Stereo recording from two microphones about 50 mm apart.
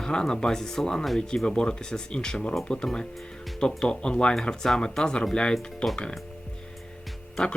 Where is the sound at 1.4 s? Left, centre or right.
Centre.